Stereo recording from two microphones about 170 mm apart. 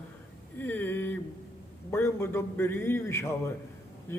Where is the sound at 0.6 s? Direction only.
10° left (ahead or behind).